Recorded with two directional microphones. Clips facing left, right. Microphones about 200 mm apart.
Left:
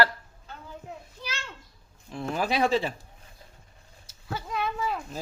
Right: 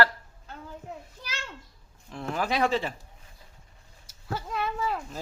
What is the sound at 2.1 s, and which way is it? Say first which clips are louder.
Speech: left 1 dB; 10° left (ahead or behind).